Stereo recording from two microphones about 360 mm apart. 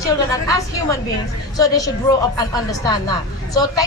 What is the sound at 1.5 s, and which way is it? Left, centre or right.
A woman's voice, centre.